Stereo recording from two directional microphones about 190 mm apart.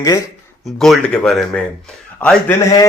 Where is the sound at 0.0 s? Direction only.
15° left (ahead or behind).